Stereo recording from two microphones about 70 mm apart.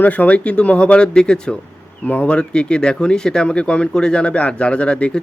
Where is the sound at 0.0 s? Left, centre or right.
Left.